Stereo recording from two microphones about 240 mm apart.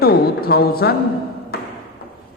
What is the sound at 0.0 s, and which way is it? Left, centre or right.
Speech, left.